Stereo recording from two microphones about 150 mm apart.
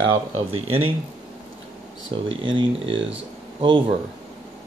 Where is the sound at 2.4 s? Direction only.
35° right (ahead or behind).